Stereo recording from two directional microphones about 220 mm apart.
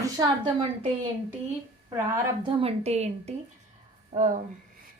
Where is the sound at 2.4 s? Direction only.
25° right (ahead or behind).